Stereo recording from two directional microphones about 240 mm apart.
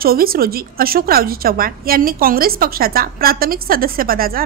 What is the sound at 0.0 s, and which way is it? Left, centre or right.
A woman's voice, right.